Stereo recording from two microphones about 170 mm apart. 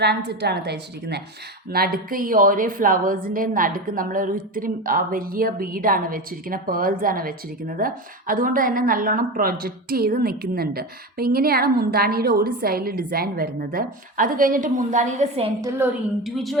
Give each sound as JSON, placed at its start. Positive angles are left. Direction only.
{"t": 0.0, "sound": "a woman's voice", "side_deg": -75}
{"t": 1.7, "sound": "speech", "side_deg": -60}
{"t": 16.2, "sound": "a woman's voice", "side_deg": 0}